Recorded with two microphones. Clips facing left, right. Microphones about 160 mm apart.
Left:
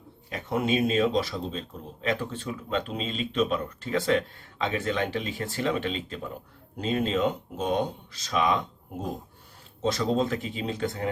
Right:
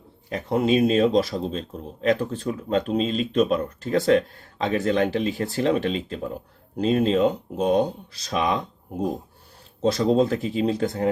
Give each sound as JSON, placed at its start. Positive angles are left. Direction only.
{"t": 0.3, "sound": "speech", "side_deg": -35}